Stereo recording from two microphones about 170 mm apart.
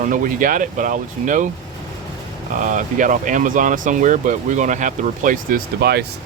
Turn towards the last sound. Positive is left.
turn(degrees=-65)  # may be behind; listen again after turning